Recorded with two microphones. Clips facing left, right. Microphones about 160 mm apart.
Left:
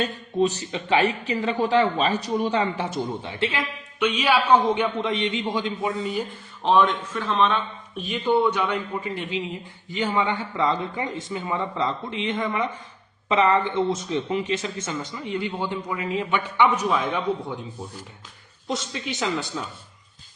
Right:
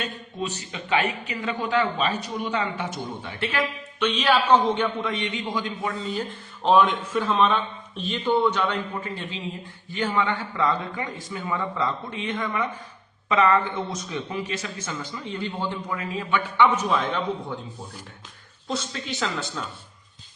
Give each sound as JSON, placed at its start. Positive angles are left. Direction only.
{"t": 0.0, "sound": "speech", "side_deg": 35}
{"t": 4.0, "sound": "a man's voice", "side_deg": 10}
{"t": 6.7, "sound": "a man's voice", "side_deg": -5}
{"t": 7.9, "sound": "a man's voice", "side_deg": 10}
{"t": 18.7, "sound": "a man's voice", "side_deg": 15}